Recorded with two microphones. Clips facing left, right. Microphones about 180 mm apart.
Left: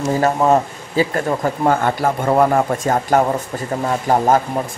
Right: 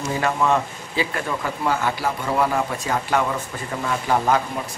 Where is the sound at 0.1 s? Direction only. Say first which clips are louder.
Left 6 dB; 40° left (ahead or behind).